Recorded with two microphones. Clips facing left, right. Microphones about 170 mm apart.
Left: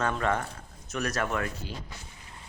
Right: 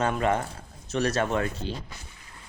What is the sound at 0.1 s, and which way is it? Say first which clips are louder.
Speech: right 3 dB; 20° right (ahead or behind).